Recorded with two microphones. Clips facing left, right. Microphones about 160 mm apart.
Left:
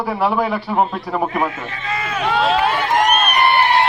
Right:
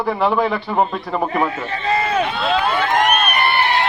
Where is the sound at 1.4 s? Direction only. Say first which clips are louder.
Right 4 dB; 35° right (ahead or behind).